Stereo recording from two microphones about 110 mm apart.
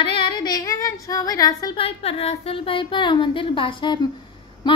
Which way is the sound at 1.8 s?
60° left (ahead or behind).